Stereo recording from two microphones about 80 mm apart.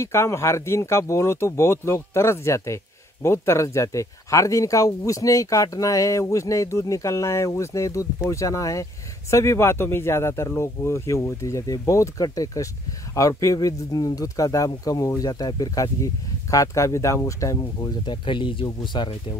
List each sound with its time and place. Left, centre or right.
0.0 s speech: left
17.7 s speech: left
18.8 s speech: left